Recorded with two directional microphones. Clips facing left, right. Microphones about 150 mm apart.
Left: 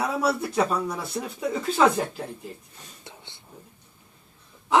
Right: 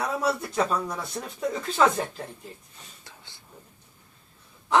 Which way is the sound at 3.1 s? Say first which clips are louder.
Left 5 dB; 25° left (ahead or behind).